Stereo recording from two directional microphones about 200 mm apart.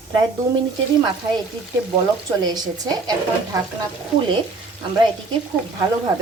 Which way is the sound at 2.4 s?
20° right (ahead or behind).